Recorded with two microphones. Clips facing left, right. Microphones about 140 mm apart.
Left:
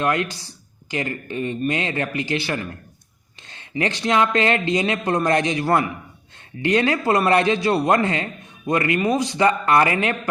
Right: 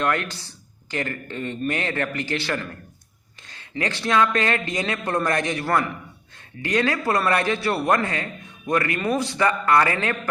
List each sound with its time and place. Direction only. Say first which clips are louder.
0.0 s a man's voice: left 2 dB; 15° left (ahead or behind)